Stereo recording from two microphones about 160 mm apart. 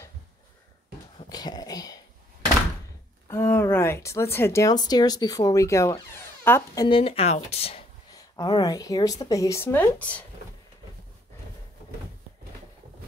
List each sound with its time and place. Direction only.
1.1 s a sound: 25° left (ahead or behind)
3.3 s speech: 15° left (ahead or behind)
6.9 s speech: 35° left (ahead or behind)
8.1 s a woman's voice: 25° left (ahead or behind); by 10.2 s 10° left (ahead or behind)